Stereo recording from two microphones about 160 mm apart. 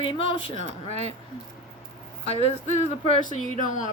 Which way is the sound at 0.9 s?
45° right (ahead or behind).